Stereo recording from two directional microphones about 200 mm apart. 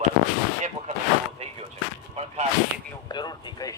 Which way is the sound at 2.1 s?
30° right (ahead or behind).